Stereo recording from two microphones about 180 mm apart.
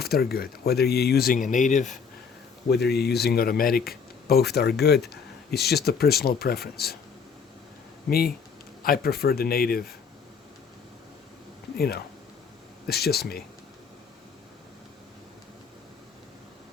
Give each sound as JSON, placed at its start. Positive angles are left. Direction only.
{"t": 0.0, "sound": "speech", "side_deg": 60}
{"t": 2.6, "sound": "speech", "side_deg": 65}
{"t": 8.8, "sound": "speech", "side_deg": 55}
{"t": 11.8, "sound": "speech", "side_deg": 60}